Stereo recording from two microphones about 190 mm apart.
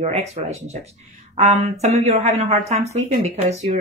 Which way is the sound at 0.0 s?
35° right (ahead or behind).